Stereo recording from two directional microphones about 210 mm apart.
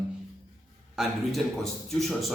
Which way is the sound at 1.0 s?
Centre (ahead or behind).